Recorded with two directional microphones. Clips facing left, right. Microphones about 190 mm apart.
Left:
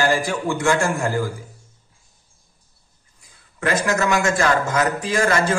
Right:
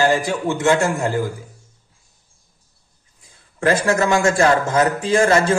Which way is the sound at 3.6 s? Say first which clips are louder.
Right 3 dB; 30° right (ahead or behind).